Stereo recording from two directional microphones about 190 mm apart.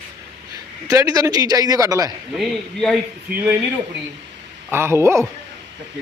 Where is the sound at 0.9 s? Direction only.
20° right (ahead or behind).